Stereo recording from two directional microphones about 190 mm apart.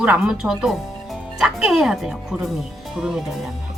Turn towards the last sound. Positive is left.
turn(degrees=0)  # may be behind; listen again after turning